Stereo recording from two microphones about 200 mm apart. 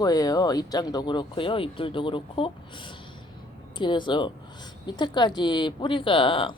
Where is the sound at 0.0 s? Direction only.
20° left (ahead or behind).